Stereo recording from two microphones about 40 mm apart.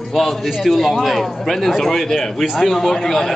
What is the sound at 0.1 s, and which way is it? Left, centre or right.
A man's voice, centre.